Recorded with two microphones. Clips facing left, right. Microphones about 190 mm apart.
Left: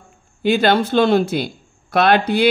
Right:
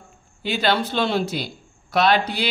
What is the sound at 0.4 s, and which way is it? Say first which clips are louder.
Speech: left 7 dB; 50° left (ahead or behind).